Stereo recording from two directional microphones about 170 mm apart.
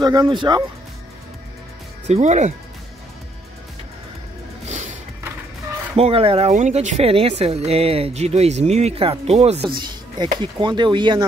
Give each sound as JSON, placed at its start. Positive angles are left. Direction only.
{"t": 0.0, "sound": "speech", "side_deg": -25}
{"t": 2.0, "sound": "speech", "side_deg": -45}
{"t": 4.6, "sound": "a sound", "side_deg": -45}
{"t": 5.9, "sound": "speech", "side_deg": -35}
{"t": 6.5, "sound": "speech", "side_deg": -45}
{"t": 9.8, "sound": "speech", "side_deg": -25}